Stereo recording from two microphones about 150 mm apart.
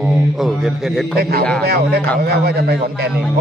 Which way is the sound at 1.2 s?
90° right.